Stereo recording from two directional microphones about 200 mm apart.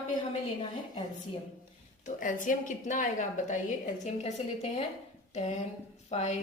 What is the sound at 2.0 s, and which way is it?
A woman's voice, 40° left (ahead or behind).